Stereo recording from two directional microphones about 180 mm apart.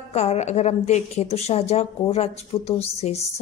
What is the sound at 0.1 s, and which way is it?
A woman's voice, 35° left (ahead or behind).